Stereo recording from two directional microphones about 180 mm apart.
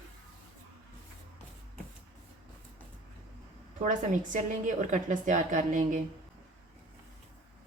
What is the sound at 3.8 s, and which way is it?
A woman's voice, 45° right (ahead or behind).